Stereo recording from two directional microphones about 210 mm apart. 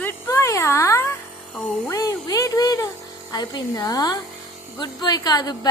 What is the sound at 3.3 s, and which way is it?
Speech, 20° left (ahead or behind).